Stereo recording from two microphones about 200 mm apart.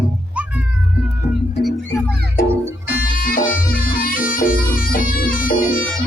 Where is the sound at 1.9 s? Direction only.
15° left (ahead or behind).